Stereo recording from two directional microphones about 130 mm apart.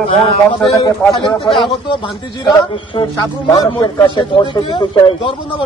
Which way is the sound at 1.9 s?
35° left (ahead or behind).